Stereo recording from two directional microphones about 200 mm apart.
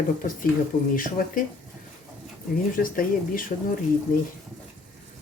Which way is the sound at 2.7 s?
45° left (ahead or behind).